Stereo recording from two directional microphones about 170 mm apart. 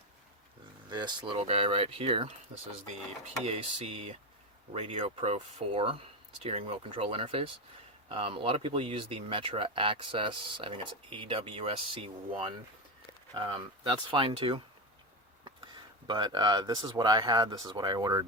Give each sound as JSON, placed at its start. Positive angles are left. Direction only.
{"t": 0.9, "sound": "speech", "side_deg": -25}
{"t": 3.4, "sound": "speech", "side_deg": -40}
{"t": 13.3, "sound": "speech", "side_deg": -30}